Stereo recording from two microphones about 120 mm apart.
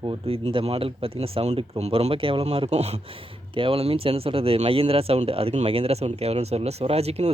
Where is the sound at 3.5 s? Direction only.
50° right (ahead or behind).